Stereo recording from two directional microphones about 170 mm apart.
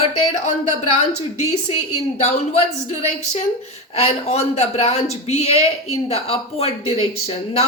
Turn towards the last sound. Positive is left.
turn(degrees=35)  # may be behind; listen again after turning